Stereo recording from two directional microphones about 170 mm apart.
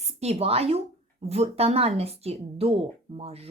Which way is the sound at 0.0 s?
40° right (ahead or behind).